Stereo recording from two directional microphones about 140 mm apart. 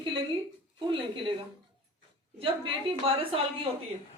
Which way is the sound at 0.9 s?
35° right (ahead or behind).